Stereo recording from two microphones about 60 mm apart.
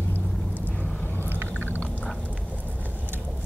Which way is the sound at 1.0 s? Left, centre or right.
Left.